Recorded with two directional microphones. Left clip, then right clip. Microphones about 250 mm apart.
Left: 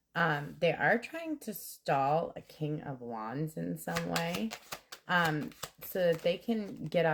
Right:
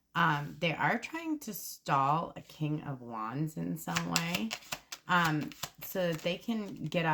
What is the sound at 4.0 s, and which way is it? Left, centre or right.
Speech, centre.